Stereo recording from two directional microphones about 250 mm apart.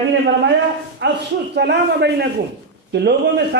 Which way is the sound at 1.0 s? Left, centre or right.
Right.